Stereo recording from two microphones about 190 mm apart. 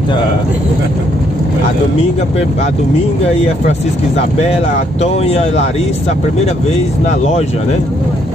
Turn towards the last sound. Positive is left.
turn(degrees=35)  # may be behind; listen again after turning